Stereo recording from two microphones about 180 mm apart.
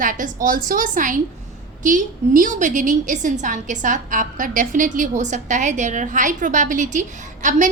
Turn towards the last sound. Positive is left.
turn(degrees=-45)  # may be behind; listen again after turning